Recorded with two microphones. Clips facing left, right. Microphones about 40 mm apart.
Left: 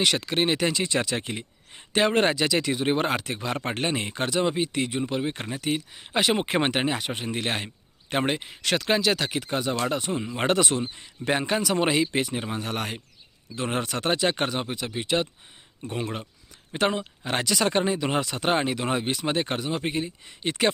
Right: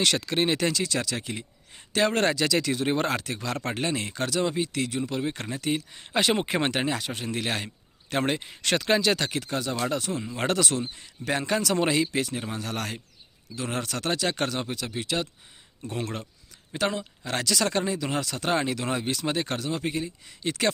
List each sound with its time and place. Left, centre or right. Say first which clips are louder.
0.0 s speech: left 1 dB; centre
0.8 s speech: left 3 dB; left; by 6.4 s centre
6.4 s speech: left 2 dB; left
9.5 s speech: left 3 dB; left
11.9 s speech: left 1 dB; left
16.7 s speech: left 3 dB; left